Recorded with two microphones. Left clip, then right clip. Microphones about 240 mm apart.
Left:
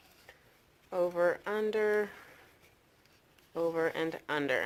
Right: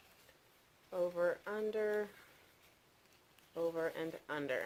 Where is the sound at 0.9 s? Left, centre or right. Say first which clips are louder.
Left 6 dB; left.